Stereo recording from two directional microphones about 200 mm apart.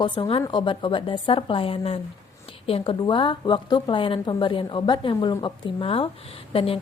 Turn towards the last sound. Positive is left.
turn(degrees=30)  # may be behind; listen again after turning